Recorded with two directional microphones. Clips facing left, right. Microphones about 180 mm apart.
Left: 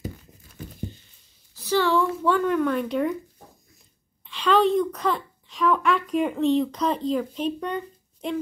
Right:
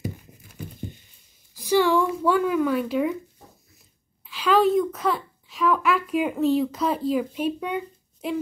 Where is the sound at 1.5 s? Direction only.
15° right (ahead or behind).